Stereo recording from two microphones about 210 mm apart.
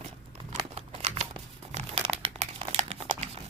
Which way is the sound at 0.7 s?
30° right (ahead or behind).